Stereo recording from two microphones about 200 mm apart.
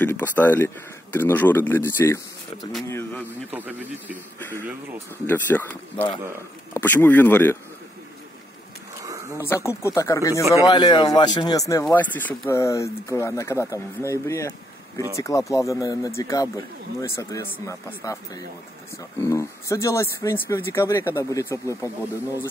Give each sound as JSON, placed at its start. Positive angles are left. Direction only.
{"t": 0.0, "sound": "speech", "side_deg": 10}
{"t": 3.5, "sound": "speech", "side_deg": -10}
{"t": 4.4, "sound": "speech", "side_deg": 10}
{"t": 9.4, "sound": "speech", "side_deg": 15}
{"t": 10.4, "sound": "speech", "side_deg": -15}
{"t": 10.7, "sound": "a man's voice", "side_deg": 20}